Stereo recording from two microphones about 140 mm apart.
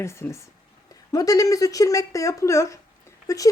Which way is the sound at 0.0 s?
20° left (ahead or behind).